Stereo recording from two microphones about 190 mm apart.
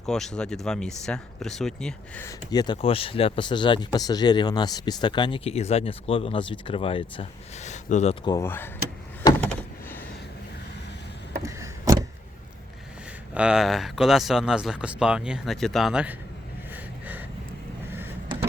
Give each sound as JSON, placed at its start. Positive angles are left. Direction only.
{"t": 0.0, "sound": "speech", "side_deg": 5}
{"t": 2.2, "sound": "speech", "side_deg": 20}
{"t": 8.2, "sound": "speech", "side_deg": 20}
{"t": 11.4, "sound": "a sound", "side_deg": -20}
{"t": 13.3, "sound": "speech", "side_deg": -5}
{"t": 16.7, "sound": "a sound", "side_deg": -10}